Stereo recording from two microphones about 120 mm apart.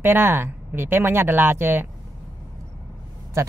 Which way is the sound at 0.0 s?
20° right (ahead or behind).